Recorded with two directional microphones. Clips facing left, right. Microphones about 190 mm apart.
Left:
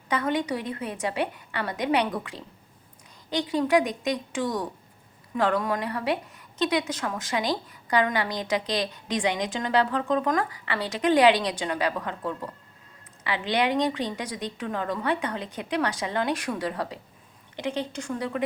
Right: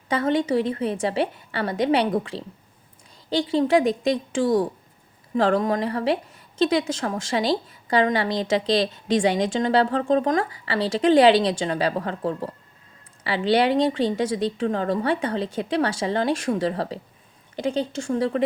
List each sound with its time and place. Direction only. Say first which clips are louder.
0.1 s a woman's voice: right 5 dB; 30° right (ahead or behind)